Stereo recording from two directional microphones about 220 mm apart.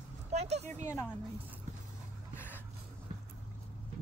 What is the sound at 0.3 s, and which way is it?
Speech, 30° right (ahead or behind).